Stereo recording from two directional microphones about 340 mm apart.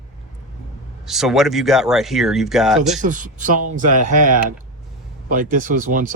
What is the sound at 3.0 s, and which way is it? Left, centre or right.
Speech, right.